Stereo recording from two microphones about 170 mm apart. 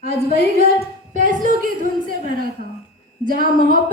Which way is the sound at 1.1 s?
50° right (ahead or behind).